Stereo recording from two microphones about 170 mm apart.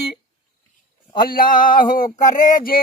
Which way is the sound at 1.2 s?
55° left (ahead or behind).